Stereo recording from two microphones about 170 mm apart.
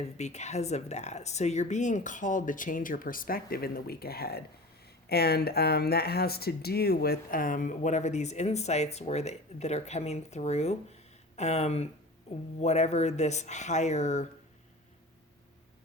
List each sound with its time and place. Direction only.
0.2 s speech: 40° left (ahead or behind)